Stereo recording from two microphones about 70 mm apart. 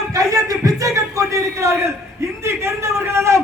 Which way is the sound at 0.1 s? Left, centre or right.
Right.